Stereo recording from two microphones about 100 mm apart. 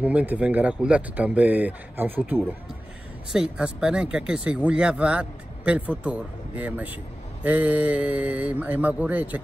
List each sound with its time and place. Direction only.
0.0 s speech: 15° right (ahead or behind)
3.3 s speech: 10° right (ahead or behind)